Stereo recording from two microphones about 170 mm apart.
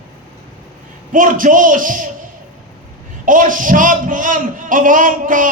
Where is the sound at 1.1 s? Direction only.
50° right (ahead or behind).